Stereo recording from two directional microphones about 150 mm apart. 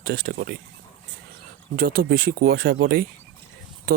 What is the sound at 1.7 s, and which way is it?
Speech, 90° right.